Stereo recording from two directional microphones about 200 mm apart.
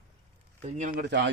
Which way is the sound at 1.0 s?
60° right (ahead or behind).